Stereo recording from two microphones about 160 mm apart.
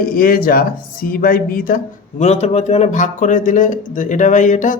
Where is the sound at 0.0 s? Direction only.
65° left (ahead or behind).